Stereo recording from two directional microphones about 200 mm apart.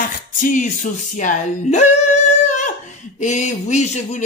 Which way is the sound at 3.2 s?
35° left (ahead or behind).